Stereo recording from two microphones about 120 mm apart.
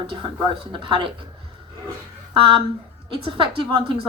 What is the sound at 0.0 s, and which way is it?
A woman's voice, 45° right (ahead or behind).